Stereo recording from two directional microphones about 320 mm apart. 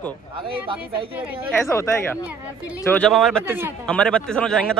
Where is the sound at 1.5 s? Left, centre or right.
Centre.